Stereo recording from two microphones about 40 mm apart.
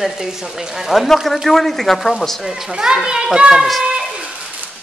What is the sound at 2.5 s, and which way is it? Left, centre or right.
Speech, centre.